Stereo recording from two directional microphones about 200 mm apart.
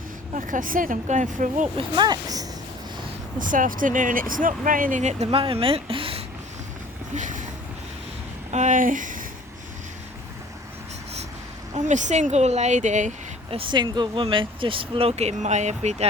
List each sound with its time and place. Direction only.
0.3 s speech: 40° right (ahead or behind)
2.0 s speech: 20° right (ahead or behind)
3.3 s speech: 40° right (ahead or behind)
7.1 s a sound: 40° right (ahead or behind)
8.4 s speech: 35° right (ahead or behind)
11.7 s speech: 35° right (ahead or behind)